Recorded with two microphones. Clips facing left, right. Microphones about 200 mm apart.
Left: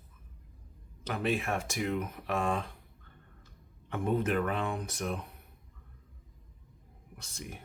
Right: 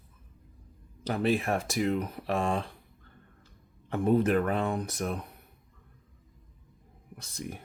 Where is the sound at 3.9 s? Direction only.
35° right (ahead or behind).